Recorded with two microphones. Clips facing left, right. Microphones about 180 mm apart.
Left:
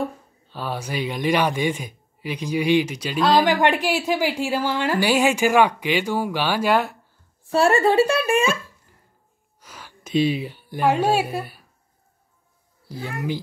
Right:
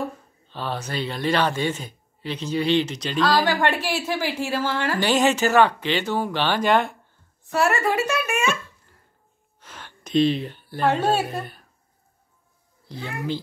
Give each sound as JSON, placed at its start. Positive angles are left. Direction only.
{"t": 0.5, "sound": "a woman's voice", "side_deg": 10}
{"t": 7.5, "sound": "speech", "side_deg": 30}
{"t": 9.6, "sound": "a woman's voice", "side_deg": 5}
{"t": 12.8, "sound": "a woman's voice", "side_deg": 10}